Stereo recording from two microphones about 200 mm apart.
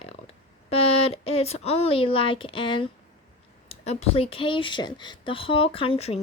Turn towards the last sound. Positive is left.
turn(degrees=30)  # may be behind; listen again after turning